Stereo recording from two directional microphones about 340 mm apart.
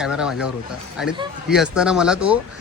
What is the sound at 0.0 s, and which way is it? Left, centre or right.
Speech, centre.